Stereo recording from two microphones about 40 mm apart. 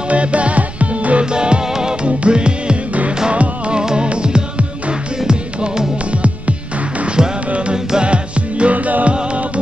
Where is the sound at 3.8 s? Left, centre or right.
Right.